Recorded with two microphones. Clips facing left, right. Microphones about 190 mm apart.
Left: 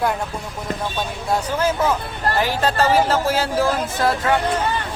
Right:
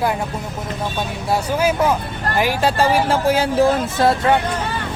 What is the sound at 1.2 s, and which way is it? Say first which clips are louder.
Speech: right 2 dB; 10° right (ahead or behind).